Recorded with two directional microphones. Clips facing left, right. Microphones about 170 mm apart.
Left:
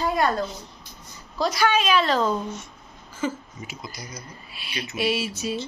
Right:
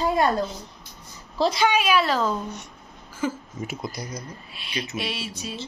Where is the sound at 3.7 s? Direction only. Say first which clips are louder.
Right 5 dB; 55° right (ahead or behind).